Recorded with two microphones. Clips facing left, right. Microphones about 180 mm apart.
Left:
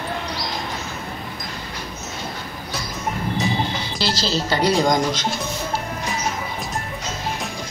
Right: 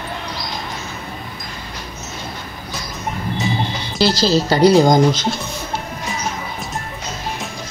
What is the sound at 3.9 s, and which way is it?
Speech, 15° right (ahead or behind).